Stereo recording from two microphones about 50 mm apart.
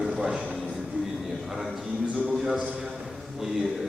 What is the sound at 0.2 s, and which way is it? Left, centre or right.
Speech, centre.